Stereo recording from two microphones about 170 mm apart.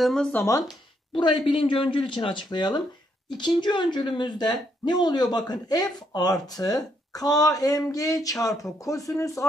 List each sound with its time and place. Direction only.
0.0 s speech: 5° left (ahead or behind)
1.1 s a woman's voice: 30° left (ahead or behind)